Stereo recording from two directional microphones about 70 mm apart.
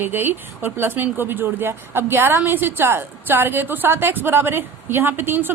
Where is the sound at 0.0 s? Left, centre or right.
Right.